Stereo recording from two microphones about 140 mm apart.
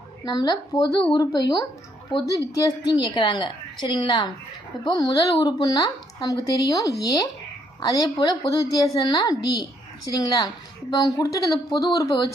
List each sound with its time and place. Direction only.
0.3 s a woman's voice: 30° left (ahead or behind)